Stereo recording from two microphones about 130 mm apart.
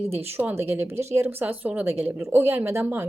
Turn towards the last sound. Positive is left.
turn(degrees=-15)  # may be behind; listen again after turning